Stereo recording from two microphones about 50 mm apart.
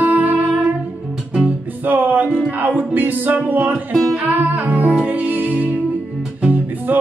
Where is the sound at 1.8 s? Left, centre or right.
Right.